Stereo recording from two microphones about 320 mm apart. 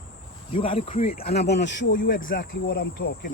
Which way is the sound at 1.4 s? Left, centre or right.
Left.